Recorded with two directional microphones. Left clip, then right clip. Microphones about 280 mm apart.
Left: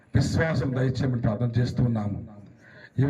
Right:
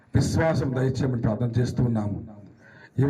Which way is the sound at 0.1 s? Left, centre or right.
Centre.